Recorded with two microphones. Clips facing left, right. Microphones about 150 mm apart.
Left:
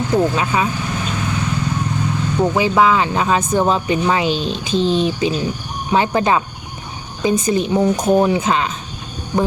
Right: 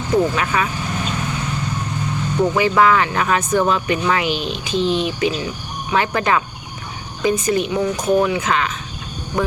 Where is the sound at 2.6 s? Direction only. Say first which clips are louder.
Even; 20° left (ahead or behind).